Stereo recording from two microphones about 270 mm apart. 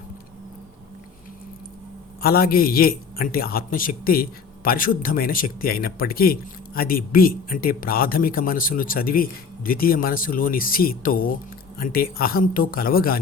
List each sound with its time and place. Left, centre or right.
2.2 s a man's voice: left